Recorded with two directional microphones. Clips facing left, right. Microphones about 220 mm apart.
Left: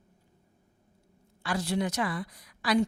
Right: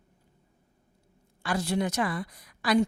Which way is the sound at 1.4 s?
50° right (ahead or behind).